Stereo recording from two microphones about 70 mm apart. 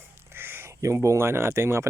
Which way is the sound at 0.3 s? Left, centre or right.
Right.